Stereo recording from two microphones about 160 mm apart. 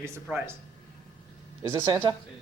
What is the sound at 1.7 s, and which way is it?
Speech, 25° right (ahead or behind).